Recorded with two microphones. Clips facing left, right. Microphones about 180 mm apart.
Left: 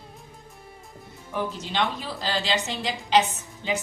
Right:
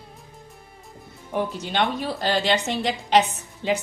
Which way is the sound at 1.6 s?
60° right (ahead or behind).